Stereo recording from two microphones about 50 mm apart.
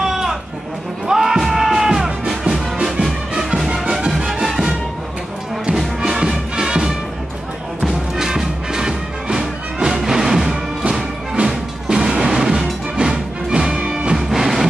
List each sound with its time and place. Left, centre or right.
0.0 s sheep: centre
1.0 s music: centre
6.1 s music: centre
7.9 s music: centre
14.1 s music: centre